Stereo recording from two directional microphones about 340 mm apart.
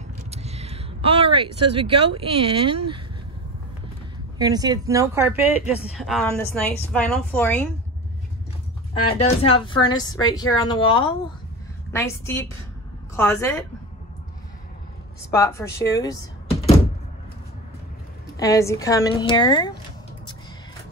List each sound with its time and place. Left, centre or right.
0.3 s speech: centre
4.4 s a woman's voice: centre
9.2 s speech: centre
15.3 s speech: centre
18.4 s speech: centre